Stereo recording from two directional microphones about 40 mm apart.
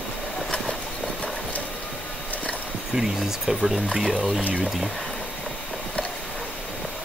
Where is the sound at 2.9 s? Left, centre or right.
Centre.